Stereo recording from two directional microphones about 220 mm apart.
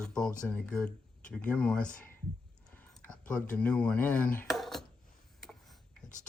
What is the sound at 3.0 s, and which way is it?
Speech, 5° left (ahead or behind).